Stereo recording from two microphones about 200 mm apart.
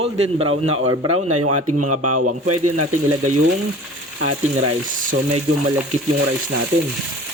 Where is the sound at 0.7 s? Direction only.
90° right.